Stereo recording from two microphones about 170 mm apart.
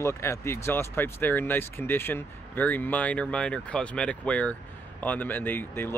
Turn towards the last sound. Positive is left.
turn(degrees=10)  # may be behind; listen again after turning